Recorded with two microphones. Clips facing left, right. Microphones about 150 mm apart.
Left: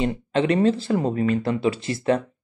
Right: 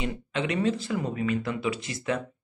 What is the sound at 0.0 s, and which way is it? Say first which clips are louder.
Speech: left 8 dB; 35° left (ahead or behind).